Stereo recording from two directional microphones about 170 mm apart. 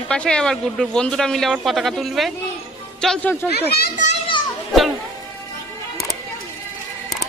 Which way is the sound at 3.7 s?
65° left (ahead or behind).